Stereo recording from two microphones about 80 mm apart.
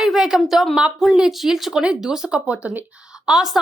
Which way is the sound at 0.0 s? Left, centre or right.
Centre.